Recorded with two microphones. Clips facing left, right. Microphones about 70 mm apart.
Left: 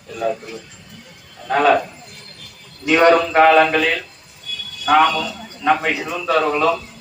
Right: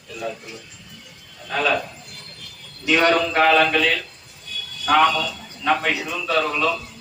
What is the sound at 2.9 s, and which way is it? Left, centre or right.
A man's voice, left.